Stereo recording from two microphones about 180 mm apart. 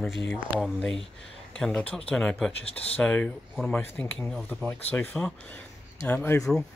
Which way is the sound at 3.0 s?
5° left (ahead or behind).